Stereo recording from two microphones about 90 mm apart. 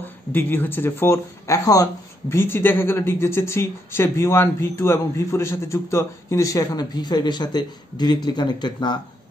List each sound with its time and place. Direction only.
0.3 s speech: 20° left (ahead or behind); by 2.3 s 40° left (ahead or behind)
2.3 s speech: 25° left (ahead or behind); by 8.9 s 50° left (ahead or behind)